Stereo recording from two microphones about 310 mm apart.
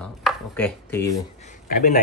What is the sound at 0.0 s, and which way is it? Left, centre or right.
Chopping, centre.